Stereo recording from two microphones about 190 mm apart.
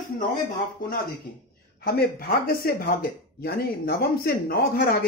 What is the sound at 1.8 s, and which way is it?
Speech, 55° left (ahead or behind).